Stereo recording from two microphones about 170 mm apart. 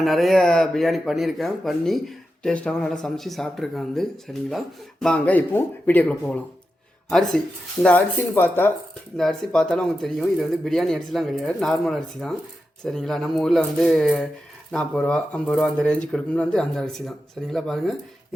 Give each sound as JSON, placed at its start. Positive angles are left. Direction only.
{"t": 0.0, "sound": "speech", "side_deg": 0}